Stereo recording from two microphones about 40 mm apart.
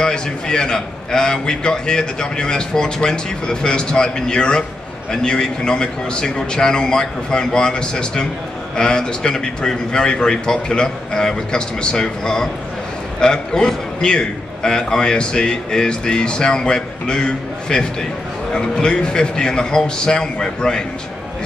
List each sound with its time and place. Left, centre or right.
0.0 s a man's voice: centre